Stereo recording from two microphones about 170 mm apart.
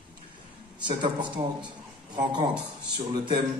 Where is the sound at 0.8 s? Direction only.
25° right (ahead or behind).